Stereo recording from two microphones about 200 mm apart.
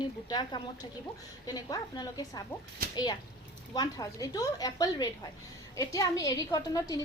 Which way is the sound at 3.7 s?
20° left (ahead or behind).